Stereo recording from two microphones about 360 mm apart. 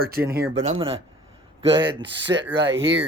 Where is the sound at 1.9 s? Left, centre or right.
Right.